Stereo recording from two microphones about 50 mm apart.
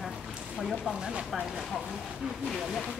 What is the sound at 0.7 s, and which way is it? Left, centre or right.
Speech, centre.